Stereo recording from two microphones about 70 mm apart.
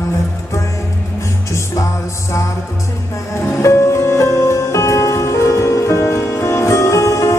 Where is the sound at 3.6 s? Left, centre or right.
Left.